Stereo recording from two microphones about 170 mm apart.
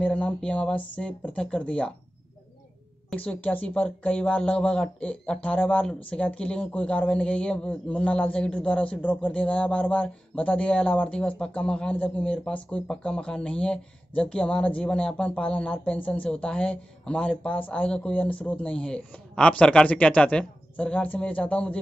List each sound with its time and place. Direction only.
0.0 s speech: 5° left (ahead or behind)
3.1 s speech: 10° left (ahead or behind)